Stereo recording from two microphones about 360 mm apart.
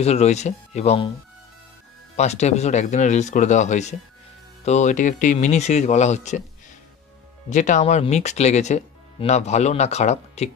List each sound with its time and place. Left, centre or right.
0.0 s speech: centre
2.1 s speech: centre
7.4 s speech: centre